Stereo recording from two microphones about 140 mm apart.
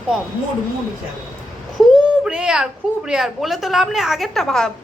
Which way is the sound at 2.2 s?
5° right (ahead or behind).